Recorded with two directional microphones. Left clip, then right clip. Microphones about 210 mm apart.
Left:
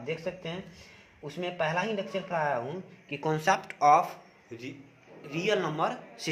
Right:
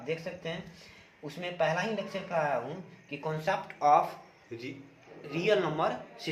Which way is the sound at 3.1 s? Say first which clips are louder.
Left 5 dB; 55° left (ahead or behind).